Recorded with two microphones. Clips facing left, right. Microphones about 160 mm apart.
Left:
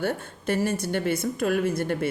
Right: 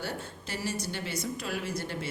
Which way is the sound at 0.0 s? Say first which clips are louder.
Left 9 dB; 55° left (ahead or behind).